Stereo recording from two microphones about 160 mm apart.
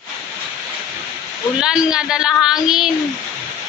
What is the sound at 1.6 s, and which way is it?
Speech, 5° right (ahead or behind).